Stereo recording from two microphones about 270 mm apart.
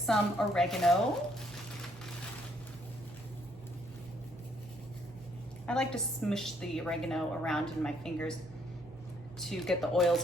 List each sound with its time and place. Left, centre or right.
0.0 s a woman's voice: centre
5.6 s a woman's voice: centre
9.4 s a woman's voice: centre